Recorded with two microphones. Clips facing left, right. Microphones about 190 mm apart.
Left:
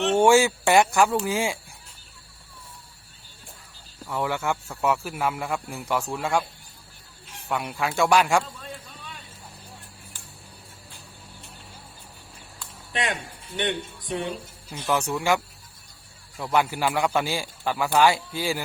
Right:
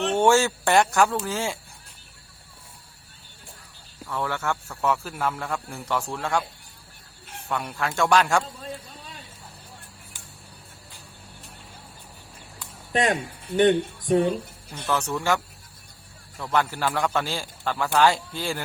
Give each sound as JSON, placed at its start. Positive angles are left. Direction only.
{"t": 0.1, "sound": "speech", "side_deg": 10}
{"t": 4.0, "sound": "speech", "side_deg": 10}
{"t": 7.4, "sound": "speech", "side_deg": 10}
{"t": 8.6, "sound": "a sound", "side_deg": -30}
{"t": 12.9, "sound": "speech", "side_deg": -40}
{"t": 14.8, "sound": "speech", "side_deg": 10}
{"t": 16.4, "sound": "speech", "side_deg": 10}